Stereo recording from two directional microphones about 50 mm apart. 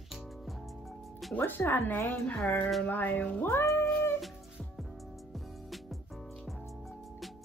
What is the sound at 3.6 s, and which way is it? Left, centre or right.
Cat, left.